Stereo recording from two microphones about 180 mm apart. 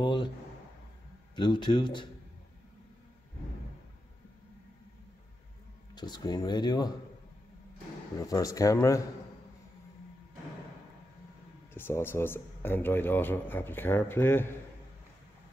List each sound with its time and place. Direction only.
0.0 s speech: 25° left (ahead or behind)
1.3 s speech: 25° left (ahead or behind)
5.9 s speech: 25° left (ahead or behind)
8.2 s speech: 20° left (ahead or behind)
11.7 s a man's voice: 10° left (ahead or behind)